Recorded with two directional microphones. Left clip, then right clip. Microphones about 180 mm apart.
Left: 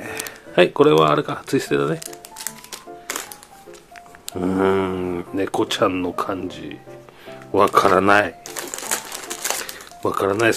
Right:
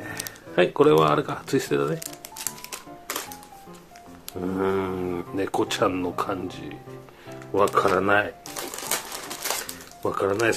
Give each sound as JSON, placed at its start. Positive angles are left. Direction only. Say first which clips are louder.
{"t": 0.0, "sound": "speech", "louder": "left 5 dB", "side_deg": 25}
{"t": 2.0, "sound": "music", "louder": "left 3 dB", "side_deg": 15}
{"t": 4.4, "sound": "speech", "louder": "left 6 dB", "side_deg": 35}
{"t": 7.5, "sound": "typewriter", "louder": "left 6 dB", "side_deg": 35}